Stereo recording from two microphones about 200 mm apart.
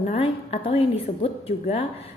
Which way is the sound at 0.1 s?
30° left (ahead or behind).